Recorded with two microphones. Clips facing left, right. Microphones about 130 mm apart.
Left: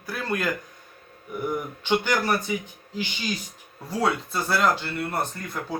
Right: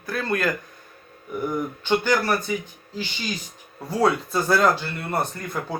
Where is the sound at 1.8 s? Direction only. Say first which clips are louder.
Right 2 dB; 15° left (ahead or behind).